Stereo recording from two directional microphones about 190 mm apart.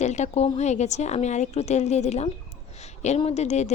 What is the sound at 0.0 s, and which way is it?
Speech, 35° left (ahead or behind).